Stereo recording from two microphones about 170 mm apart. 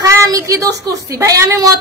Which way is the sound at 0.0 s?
20° right (ahead or behind).